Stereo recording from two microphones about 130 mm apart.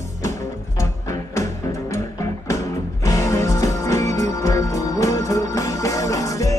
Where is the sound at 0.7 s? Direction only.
25° left (ahead or behind).